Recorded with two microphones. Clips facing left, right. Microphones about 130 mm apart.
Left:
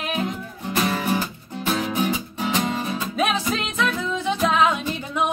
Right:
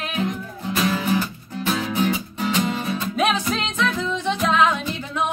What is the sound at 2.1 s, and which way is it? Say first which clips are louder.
Music: right 1 dB; 15° left (ahead or behind).